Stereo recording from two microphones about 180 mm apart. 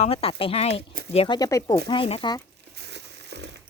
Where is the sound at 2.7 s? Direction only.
70° right (ahead or behind).